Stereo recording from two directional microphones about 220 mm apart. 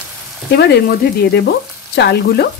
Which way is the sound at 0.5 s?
50° left (ahead or behind).